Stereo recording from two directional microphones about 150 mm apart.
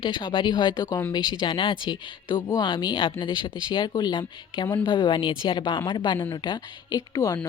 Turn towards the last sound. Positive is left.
turn(degrees=25)  # may be behind; listen again after turning